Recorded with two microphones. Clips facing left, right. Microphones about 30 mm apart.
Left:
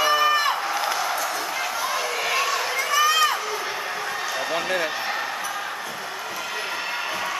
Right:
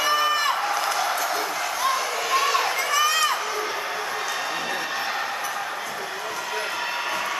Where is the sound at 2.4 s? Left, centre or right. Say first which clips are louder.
Right 1 dB; centre.